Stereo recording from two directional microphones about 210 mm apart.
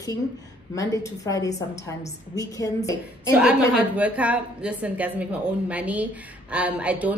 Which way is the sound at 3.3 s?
5° right (ahead or behind).